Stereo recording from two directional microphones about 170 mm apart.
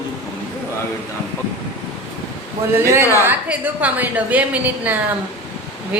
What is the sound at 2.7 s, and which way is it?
A woman's voice, 15° right (ahead or behind).